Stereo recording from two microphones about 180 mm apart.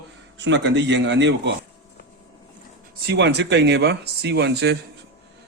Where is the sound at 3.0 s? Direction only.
70° right (ahead or behind).